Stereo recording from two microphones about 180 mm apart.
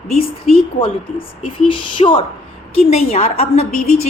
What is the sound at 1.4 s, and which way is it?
A woman's voice, 30° left (ahead or behind).